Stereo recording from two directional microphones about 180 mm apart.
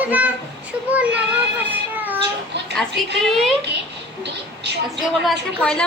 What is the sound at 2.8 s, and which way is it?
Speech, centre (ahead or behind).